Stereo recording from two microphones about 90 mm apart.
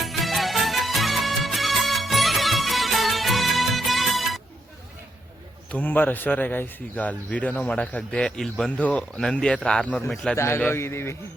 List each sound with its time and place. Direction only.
0.0 s music: centre (ahead or behind)
5.7 s a man's voice: 20° left (ahead or behind)
10.3 s a man's voice: 30° left (ahead or behind)